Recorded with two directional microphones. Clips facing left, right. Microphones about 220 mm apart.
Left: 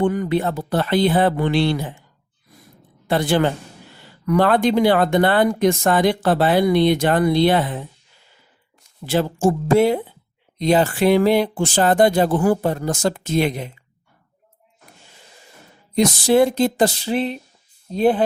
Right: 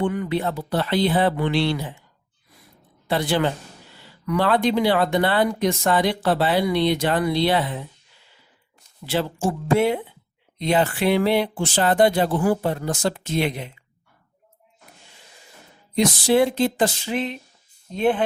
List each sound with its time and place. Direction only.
0.0 s speech: 45° left (ahead or behind)
3.1 s speech: 50° left (ahead or behind)
9.0 s speech: 45° left (ahead or behind)
16.0 s speech: 45° left (ahead or behind)